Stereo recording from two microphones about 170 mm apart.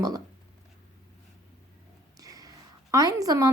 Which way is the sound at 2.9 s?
20° right (ahead or behind).